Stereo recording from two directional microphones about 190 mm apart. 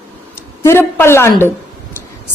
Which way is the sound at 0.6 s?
15° left (ahead or behind).